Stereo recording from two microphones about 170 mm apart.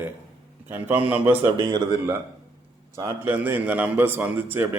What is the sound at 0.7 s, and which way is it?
Speech, 10° right (ahead or behind).